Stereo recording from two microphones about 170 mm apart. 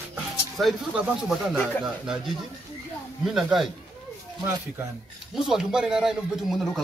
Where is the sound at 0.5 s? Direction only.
Centre (ahead or behind).